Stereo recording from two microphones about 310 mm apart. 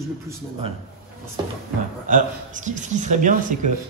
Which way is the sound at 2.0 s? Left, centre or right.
Right.